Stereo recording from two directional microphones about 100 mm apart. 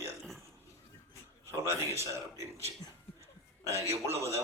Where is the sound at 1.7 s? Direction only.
25° right (ahead or behind).